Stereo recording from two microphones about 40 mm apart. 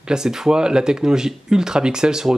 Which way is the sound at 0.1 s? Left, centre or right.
Centre.